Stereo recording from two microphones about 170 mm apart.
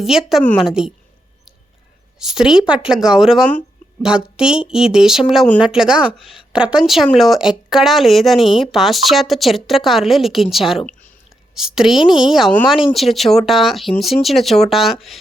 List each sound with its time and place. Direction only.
0.0 s speech: centre (ahead or behind)
2.1 s speech: 5° right (ahead or behind)
11.9 s speech: 25° left (ahead or behind)
12.3 s speech: centre (ahead or behind)